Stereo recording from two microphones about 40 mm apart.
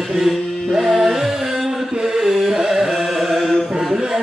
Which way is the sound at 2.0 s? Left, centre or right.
Centre.